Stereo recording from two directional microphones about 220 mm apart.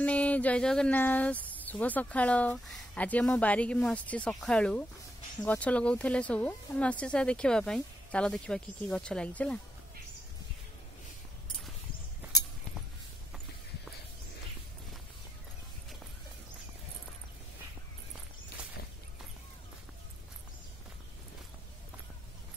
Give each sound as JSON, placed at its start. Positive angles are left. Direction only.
{"t": 0.0, "sound": "speech", "side_deg": 5}